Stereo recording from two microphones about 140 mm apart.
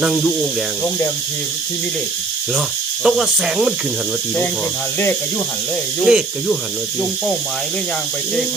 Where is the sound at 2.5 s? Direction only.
5° right (ahead or behind).